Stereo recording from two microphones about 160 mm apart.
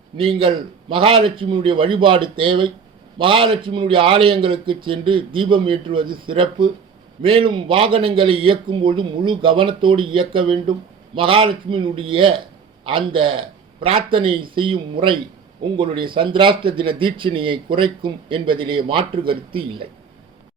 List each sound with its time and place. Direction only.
0.2 s speech: 35° right (ahead or behind)